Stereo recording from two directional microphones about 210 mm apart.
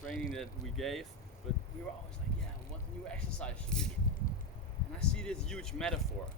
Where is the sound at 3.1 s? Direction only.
5° left (ahead or behind).